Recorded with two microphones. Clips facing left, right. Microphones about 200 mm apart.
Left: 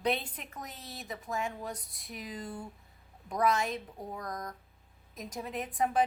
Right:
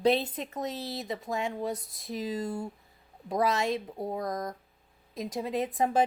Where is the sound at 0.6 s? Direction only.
80° right.